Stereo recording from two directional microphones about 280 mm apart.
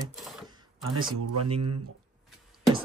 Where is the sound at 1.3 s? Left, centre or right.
Right.